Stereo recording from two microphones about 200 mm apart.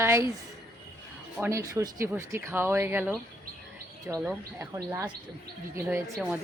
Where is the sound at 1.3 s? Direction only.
10° right (ahead or behind).